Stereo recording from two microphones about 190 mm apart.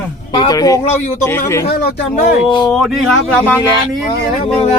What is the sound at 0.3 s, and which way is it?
Speech, 20° left (ahead or behind).